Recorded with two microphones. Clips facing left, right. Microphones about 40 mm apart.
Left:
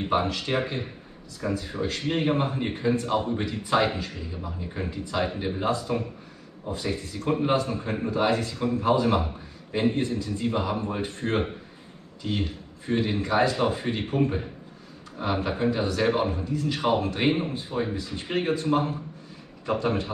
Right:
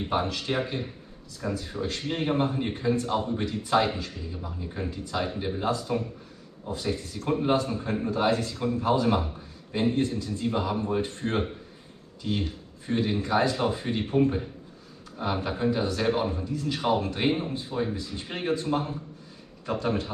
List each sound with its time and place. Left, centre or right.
0.0 s a man's voice: centre
5.7 s a man's voice: centre
10.0 s a man's voice: centre
10.3 s a man's voice: centre